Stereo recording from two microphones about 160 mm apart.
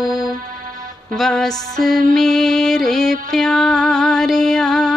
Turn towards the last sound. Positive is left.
turn(degrees=5)  # may be behind; listen again after turning